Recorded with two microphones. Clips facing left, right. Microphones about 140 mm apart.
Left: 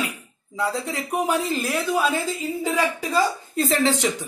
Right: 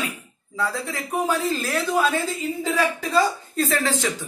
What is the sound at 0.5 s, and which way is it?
Speech, 20° left (ahead or behind).